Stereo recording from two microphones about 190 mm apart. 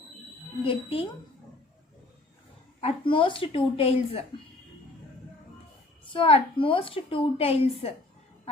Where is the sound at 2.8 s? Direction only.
30° left (ahead or behind).